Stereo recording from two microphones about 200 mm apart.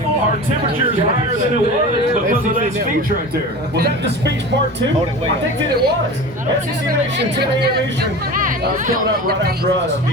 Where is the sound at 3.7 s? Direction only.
55° right (ahead or behind).